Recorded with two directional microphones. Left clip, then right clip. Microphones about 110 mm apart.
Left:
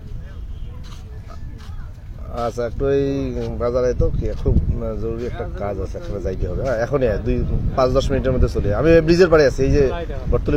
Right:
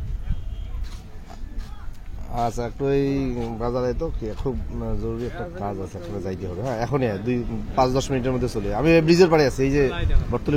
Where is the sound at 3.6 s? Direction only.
20° right (ahead or behind); by 10.0 s 40° right (ahead or behind).